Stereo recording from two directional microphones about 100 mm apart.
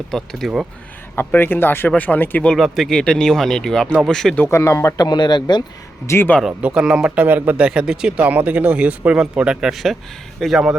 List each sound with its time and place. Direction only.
0.1 s speech: centre (ahead or behind)
1.1 s speech: 20° left (ahead or behind)
2.6 s speech: centre (ahead or behind)
4.4 s speech: 25° left (ahead or behind)
4.9 s speech: 45° left (ahead or behind)
6.1 s speech: 25° left (ahead or behind)
6.6 s speech: 10° right (ahead or behind)